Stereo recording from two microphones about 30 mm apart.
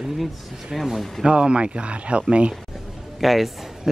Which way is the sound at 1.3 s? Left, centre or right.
Right.